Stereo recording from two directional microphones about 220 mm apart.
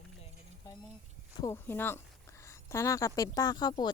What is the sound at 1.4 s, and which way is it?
A woman's voice, 10° left (ahead or behind).